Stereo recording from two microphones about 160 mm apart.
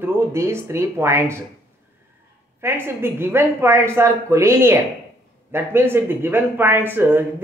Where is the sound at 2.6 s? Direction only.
15° right (ahead or behind).